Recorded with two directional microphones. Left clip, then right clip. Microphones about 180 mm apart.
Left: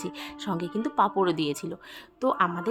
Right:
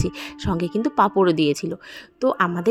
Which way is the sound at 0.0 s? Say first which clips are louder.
Right 7 dB; 30° right (ahead or behind).